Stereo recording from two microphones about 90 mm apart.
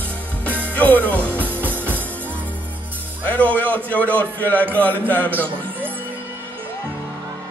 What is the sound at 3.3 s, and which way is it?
Speech, 15° left (ahead or behind).